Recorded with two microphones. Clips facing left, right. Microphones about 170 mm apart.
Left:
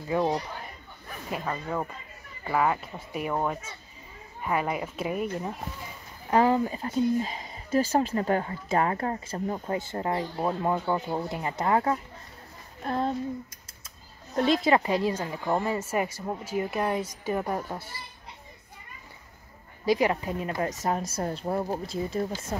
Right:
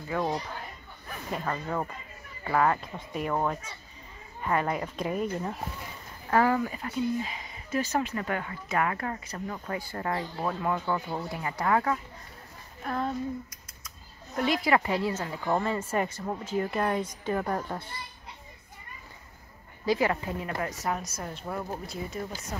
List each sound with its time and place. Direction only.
0.1 s speech: 15° left (ahead or behind)
6.3 s speech: 20° left (ahead or behind)
12.8 s female singing: 30° left (ahead or behind)
13.8 s speech: 30° left (ahead or behind); by 17.9 s 10° left (ahead or behind)
19.8 s speech: 15° left (ahead or behind)
21.1 s speech: 35° left (ahead or behind)